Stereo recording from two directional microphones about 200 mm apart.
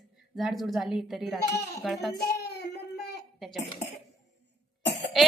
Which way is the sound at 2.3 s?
55° left (ahead or behind).